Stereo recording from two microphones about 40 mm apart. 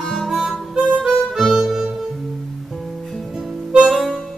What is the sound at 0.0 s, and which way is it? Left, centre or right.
Harmonica, centre.